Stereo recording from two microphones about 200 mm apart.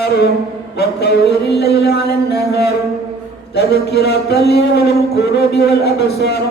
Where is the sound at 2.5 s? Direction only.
55° left (ahead or behind).